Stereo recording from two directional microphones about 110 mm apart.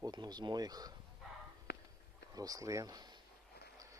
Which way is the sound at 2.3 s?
35° right (ahead or behind).